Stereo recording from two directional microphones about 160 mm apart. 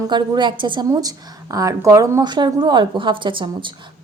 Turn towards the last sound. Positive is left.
turn(degrees=-30)  # may be behind; listen again after turning